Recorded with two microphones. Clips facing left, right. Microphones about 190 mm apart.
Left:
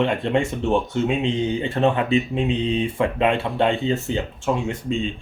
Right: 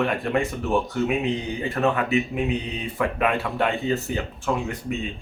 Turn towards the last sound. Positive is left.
turn(degrees=25)  # may be behind; listen again after turning